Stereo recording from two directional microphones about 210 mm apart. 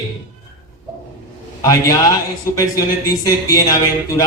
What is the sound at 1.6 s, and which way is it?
A man's voice, 15° left (ahead or behind).